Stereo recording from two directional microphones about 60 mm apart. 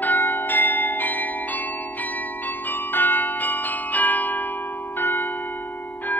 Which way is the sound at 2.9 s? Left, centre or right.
Left.